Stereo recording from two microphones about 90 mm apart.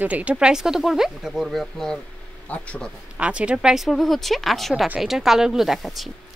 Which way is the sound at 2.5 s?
15° left (ahead or behind).